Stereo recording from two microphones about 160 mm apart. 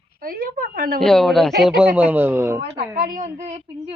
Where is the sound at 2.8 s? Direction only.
55° right (ahead or behind).